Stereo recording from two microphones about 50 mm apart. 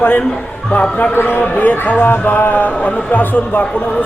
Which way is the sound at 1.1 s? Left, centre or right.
Left.